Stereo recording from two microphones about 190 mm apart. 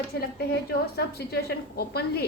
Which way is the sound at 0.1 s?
55° left (ahead or behind).